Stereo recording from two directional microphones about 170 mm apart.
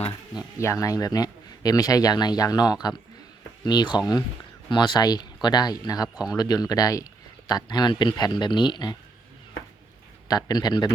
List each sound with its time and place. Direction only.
0.3 s a man's voice: 20° left (ahead or behind)
10.2 s a man's voice: 25° left (ahead or behind)